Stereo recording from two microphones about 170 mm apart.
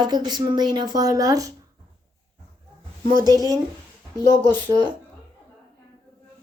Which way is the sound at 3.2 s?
20° right (ahead or behind).